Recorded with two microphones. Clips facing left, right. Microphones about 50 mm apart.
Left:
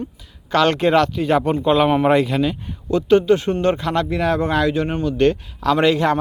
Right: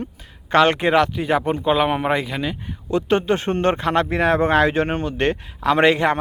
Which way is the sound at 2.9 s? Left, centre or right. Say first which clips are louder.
Left 4 dB; right.